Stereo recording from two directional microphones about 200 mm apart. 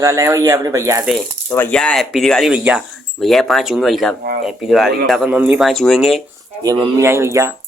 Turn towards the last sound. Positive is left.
turn(degrees=-15)  # may be behind; listen again after turning